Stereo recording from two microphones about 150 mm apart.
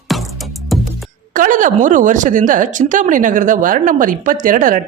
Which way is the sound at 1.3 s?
60° right (ahead or behind).